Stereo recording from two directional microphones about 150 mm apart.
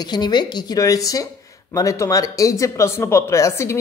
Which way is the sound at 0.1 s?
30° left (ahead or behind).